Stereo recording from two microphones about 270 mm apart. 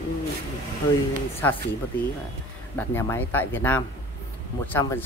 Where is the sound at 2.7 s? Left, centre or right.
Centre.